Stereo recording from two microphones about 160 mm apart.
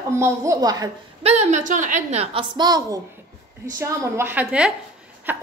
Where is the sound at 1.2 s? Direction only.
45° right (ahead or behind).